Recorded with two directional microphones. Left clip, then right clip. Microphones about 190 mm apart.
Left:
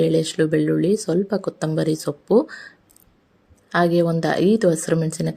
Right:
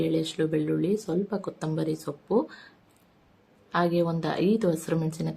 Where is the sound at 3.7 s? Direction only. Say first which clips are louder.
Left 7 dB; 30° left (ahead or behind).